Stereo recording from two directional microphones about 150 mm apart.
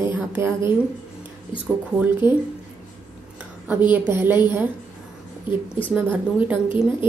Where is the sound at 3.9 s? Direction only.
15° right (ahead or behind).